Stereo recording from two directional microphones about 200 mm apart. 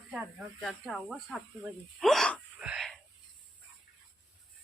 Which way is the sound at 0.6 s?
Centre (ahead or behind).